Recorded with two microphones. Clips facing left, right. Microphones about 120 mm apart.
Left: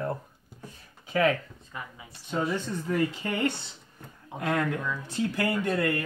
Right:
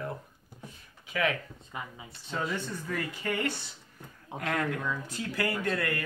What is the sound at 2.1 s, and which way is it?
Speech, 20° left (ahead or behind).